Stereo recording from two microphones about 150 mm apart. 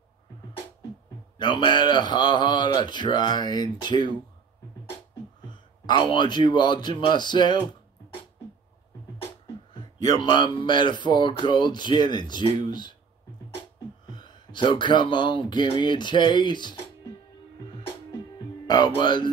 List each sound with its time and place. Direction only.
1.4 s speech: 30° left (ahead or behind)
5.9 s speech: 30° left (ahead or behind)
10.1 s speech: 30° left (ahead or behind)
14.1 s speech: 30° left (ahead or behind)
18.7 s speech: 30° left (ahead or behind)